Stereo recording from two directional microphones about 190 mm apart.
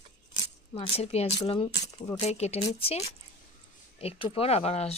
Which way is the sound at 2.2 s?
35° left (ahead or behind).